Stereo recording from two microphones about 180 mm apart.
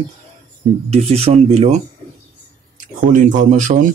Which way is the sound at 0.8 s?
35° right (ahead or behind).